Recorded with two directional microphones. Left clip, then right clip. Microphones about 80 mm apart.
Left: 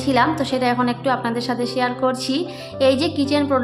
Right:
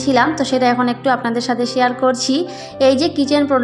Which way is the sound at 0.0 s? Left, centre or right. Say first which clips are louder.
Right 3 dB; right.